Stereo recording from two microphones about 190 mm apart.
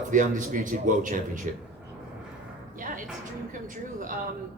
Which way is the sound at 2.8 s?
45° right (ahead or behind).